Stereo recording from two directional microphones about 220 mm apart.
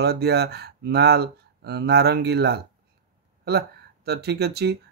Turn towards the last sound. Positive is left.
turn(degrees=-50)  # may be behind; listen again after turning